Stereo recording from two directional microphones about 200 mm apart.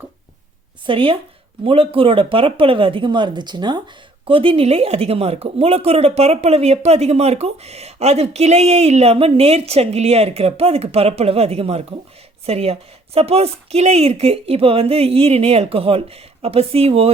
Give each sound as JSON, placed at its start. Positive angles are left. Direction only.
{"t": 0.9, "sound": "speech", "side_deg": -25}